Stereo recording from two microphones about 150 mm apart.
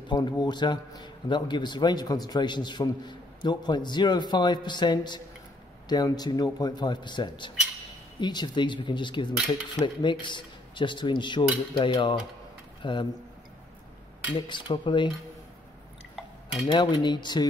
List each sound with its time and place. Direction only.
0.1 s a man's voice: 30° left (ahead or behind)
14.3 s speech: 30° left (ahead or behind)
16.7 s a man's voice: 30° left (ahead or behind)